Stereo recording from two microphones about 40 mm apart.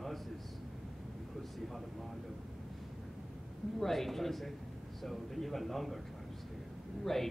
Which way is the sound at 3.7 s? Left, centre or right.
Centre.